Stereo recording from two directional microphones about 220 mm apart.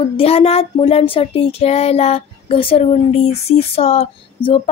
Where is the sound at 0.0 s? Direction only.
25° left (ahead or behind).